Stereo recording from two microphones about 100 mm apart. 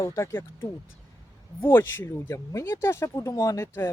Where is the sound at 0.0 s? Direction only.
30° left (ahead or behind).